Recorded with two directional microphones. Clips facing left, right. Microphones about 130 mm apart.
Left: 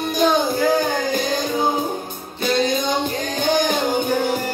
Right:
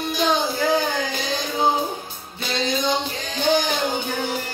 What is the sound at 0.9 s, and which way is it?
Music, 50° left (ahead or behind).